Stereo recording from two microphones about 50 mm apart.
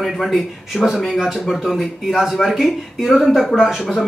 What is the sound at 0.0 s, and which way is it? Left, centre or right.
A man's voice, centre.